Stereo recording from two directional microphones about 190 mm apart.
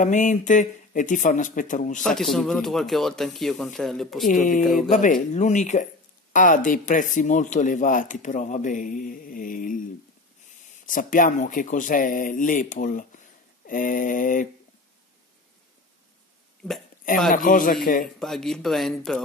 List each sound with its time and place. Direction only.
0.0 s speech: 40° left (ahead or behind)
2.0 s speech: centre (ahead or behind)
4.3 s speech: 45° left (ahead or behind)
10.9 s speech: 45° left (ahead or behind)
16.6 s speech: 5° left (ahead or behind)
17.3 s speech: 45° left (ahead or behind)
18.2 s speech: centre (ahead or behind)